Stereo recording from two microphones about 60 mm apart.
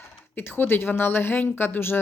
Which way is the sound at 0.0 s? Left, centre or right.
Left.